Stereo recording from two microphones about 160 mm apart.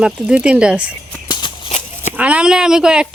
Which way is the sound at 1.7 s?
45° left (ahead or behind).